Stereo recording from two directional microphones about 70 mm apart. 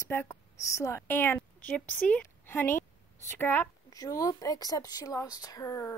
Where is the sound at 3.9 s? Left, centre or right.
Left.